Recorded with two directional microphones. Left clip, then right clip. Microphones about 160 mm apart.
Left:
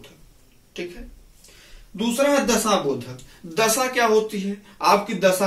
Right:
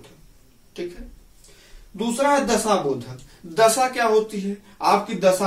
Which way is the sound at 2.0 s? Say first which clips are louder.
Even; 15° right (ahead or behind).